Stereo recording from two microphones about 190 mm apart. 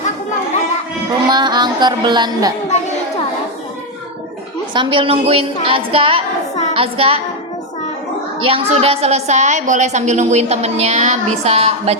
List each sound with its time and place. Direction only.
1.3 s a woman's voice: 25° right (ahead or behind)
4.7 s a woman's voice: 25° right (ahead or behind)
8.4 s a woman's voice: 30° right (ahead or behind)